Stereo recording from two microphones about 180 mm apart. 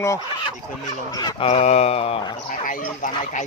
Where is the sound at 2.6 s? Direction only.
45° left (ahead or behind).